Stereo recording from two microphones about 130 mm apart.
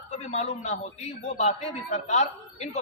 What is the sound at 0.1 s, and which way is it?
A man's voice, 60° left (ahead or behind).